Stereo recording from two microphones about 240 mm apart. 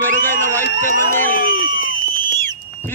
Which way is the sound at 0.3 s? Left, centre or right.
Centre.